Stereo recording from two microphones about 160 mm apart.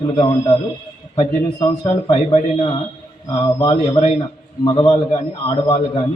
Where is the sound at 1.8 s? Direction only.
30° left (ahead or behind).